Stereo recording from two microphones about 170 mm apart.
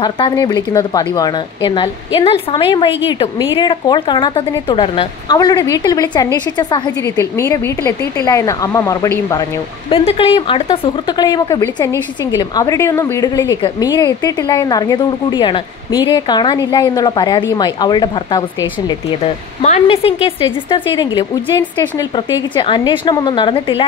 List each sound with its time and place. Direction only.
0.0 s a woman's voice: 25° left (ahead or behind)
9.8 s a woman's voice: 35° left (ahead or behind)
19.6 s a woman's voice: 40° left (ahead or behind)